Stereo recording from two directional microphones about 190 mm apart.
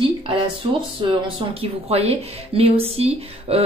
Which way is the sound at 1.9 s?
30° right (ahead or behind).